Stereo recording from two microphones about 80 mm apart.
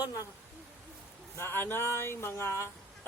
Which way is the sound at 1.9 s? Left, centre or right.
Left.